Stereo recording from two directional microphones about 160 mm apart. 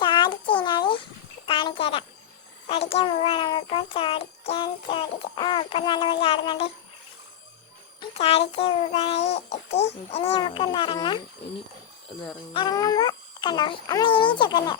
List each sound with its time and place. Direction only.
0.0 s a sound: 30° left (ahead or behind)
2.6 s a child's voice: 40° left (ahead or behind)
8.1 s a child's voice: 40° left (ahead or behind)
12.5 s a child's voice: 25° left (ahead or behind)